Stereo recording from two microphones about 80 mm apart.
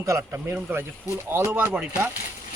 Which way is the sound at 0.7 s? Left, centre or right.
Right.